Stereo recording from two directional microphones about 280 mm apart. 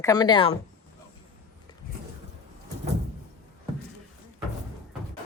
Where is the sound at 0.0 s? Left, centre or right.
Centre.